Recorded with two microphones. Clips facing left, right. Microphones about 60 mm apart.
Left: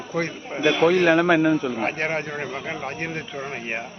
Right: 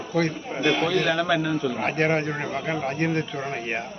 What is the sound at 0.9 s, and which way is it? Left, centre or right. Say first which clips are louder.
Speech: left 5 dB; left.